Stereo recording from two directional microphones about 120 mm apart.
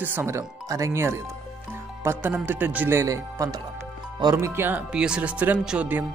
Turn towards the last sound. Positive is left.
turn(degrees=-10)  # may be behind; listen again after turning